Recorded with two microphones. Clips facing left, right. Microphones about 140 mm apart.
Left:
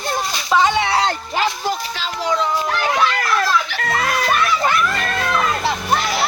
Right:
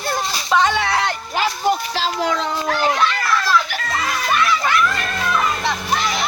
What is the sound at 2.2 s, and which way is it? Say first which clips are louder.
Speech: left 4 dB; 90° right.